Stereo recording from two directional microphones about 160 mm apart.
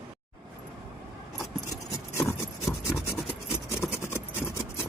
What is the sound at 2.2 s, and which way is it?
Rub, 20° left (ahead or behind).